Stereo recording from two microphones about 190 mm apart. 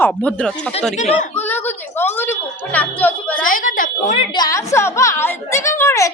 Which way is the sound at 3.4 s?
45° left (ahead or behind).